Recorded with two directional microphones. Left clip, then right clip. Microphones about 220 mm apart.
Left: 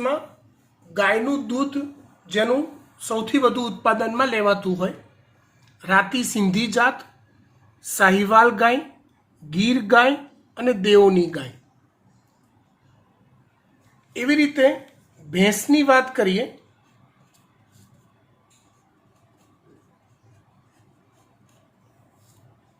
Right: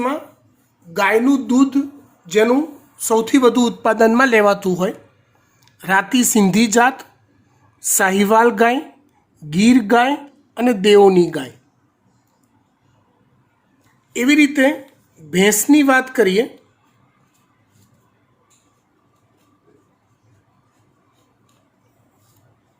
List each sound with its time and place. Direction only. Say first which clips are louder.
0.9 s speech: right 5 dB; 55° right (ahead or behind)
14.1 s speech: right 6 dB; 55° right (ahead or behind)